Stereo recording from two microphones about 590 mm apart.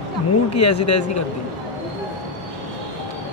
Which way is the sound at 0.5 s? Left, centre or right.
Left.